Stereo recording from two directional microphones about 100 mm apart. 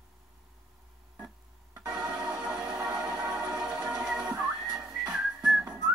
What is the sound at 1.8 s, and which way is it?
Music, 10° right (ahead or behind).